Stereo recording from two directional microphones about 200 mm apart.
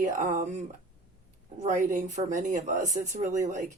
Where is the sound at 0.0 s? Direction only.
40° right (ahead or behind).